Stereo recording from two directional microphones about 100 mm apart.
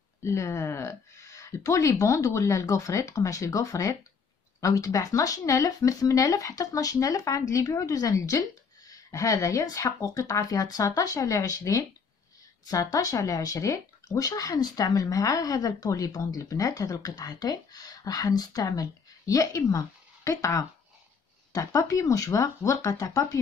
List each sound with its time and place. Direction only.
0.2 s speech: 30° left (ahead or behind)